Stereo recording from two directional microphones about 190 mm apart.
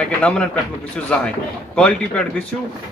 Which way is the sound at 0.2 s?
5° left (ahead or behind).